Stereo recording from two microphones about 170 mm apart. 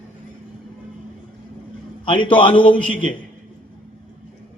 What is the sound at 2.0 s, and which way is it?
Speech, 30° left (ahead or behind).